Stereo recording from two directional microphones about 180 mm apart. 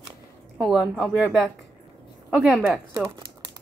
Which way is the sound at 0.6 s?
Centre (ahead or behind).